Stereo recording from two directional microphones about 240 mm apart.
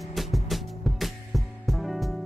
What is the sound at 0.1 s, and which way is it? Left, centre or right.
Music, centre.